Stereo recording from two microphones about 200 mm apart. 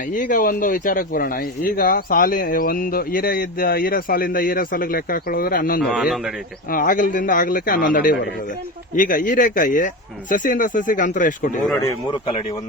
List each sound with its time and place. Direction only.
0.1 s speech: 40° left (ahead or behind)
5.8 s a man's voice: 5° right (ahead or behind)
6.7 s speech: 45° left (ahead or behind)